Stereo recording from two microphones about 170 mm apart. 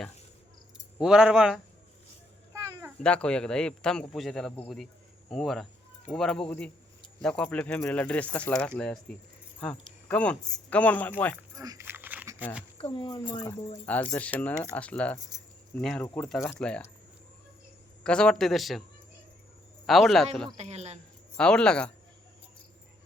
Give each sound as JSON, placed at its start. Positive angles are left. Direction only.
{"t": 0.9, "sound": "speech", "side_deg": -5}
{"t": 3.0, "sound": "speech", "side_deg": 5}
{"t": 11.5, "sound": "a sound", "side_deg": -20}
{"t": 12.8, "sound": "speech", "side_deg": 30}
{"t": 13.8, "sound": "speech", "side_deg": 10}
{"t": 18.0, "sound": "speech", "side_deg": 5}
{"t": 19.9, "sound": "speech", "side_deg": 0}
{"t": 20.6, "sound": "speech", "side_deg": -40}
{"t": 21.3, "sound": "speech", "side_deg": 5}